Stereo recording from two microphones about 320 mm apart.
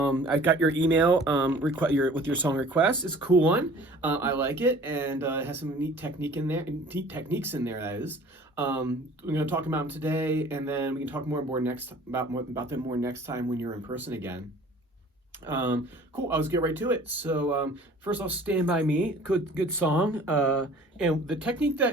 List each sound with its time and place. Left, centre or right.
0.0 s speech: centre
0.5 s speech: right
0.9 s speech: centre
15.4 s speech: centre